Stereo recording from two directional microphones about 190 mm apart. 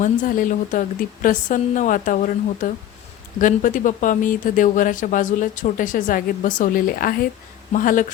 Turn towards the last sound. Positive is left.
turn(degrees=45)  # may be behind; listen again after turning